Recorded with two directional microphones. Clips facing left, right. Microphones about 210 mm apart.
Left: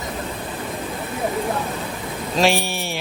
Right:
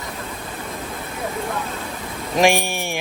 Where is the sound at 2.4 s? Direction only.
15° right (ahead or behind).